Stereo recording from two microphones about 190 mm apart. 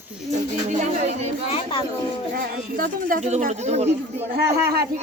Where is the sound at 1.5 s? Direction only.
30° left (ahead or behind).